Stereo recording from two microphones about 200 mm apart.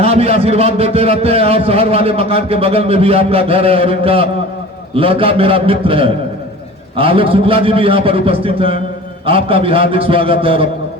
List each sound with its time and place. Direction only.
0.0 s a man's voice: 30° right (ahead or behind)